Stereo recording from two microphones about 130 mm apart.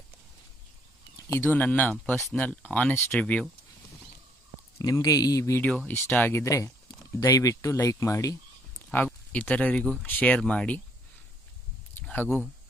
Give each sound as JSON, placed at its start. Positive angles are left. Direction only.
{"t": 1.3, "sound": "speech", "side_deg": 15}
{"t": 4.7, "sound": "speech", "side_deg": 25}
{"t": 5.7, "sound": "speech", "side_deg": 10}
{"t": 8.9, "sound": "speech", "side_deg": 10}
{"t": 12.1, "sound": "speech", "side_deg": 15}